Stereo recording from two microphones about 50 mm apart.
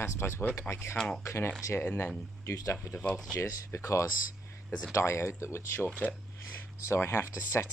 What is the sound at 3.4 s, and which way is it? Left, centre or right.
Speech, left.